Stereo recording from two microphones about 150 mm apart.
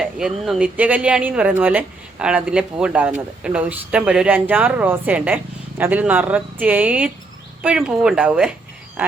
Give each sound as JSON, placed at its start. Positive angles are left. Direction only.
{"t": 0.0, "sound": "speech", "side_deg": -5}